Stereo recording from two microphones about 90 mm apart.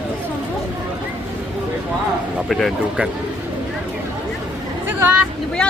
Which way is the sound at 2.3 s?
Centre (ahead or behind).